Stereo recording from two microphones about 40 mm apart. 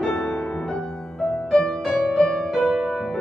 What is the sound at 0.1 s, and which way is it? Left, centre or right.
Music, left.